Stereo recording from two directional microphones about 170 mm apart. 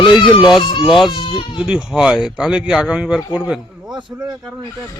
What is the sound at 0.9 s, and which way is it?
Speech, centre (ahead or behind).